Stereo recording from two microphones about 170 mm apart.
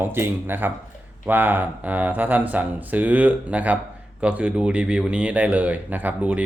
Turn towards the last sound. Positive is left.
turn(degrees=-10)  # may be behind; listen again after turning